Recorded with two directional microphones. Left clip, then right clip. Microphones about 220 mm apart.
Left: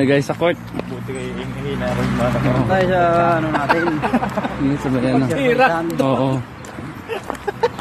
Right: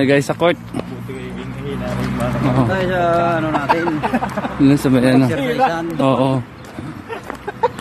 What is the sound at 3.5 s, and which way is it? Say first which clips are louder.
Speech: even; centre (ahead or behind).